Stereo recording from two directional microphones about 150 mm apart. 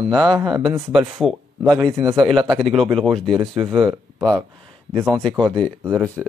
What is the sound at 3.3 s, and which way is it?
Speech, 35° right (ahead or behind).